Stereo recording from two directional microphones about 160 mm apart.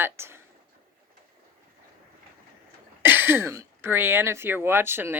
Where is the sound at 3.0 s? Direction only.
10° right (ahead or behind).